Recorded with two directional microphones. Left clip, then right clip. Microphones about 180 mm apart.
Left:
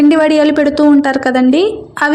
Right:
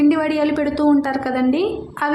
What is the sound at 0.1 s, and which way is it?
A woman's voice, 35° left (ahead or behind).